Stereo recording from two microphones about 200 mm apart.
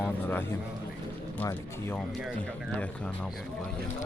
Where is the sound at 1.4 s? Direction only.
10° left (ahead or behind).